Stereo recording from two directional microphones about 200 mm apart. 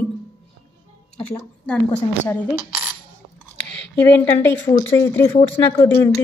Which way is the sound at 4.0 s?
10° left (ahead or behind).